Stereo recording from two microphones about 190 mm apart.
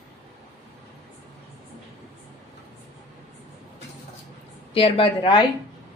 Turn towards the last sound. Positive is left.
turn(degrees=25)  # may be behind; listen again after turning